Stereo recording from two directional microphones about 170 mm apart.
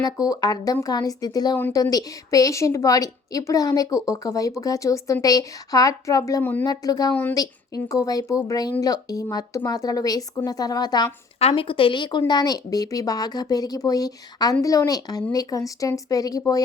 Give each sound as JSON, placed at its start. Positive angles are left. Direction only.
{"t": 0.0, "sound": "a woman's voice", "side_deg": 20}
{"t": 6.7, "sound": "a woman's voice", "side_deg": 20}
{"t": 7.1, "sound": "speech", "side_deg": 10}
{"t": 7.3, "sound": "a woman's voice", "side_deg": 20}
{"t": 11.3, "sound": "a woman's voice", "side_deg": 35}